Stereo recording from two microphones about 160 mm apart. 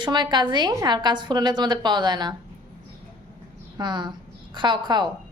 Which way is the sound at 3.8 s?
30° right (ahead or behind).